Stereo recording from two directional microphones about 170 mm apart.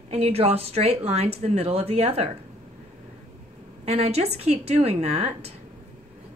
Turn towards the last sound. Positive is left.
turn(degrees=-40)  # may be behind; listen again after turning